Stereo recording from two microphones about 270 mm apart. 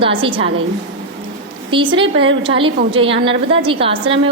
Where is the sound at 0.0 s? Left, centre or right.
Centre.